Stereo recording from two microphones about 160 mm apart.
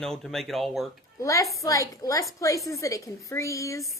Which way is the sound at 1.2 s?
20° left (ahead or behind).